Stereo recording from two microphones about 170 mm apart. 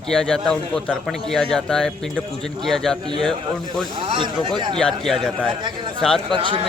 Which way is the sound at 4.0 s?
30° right (ahead or behind).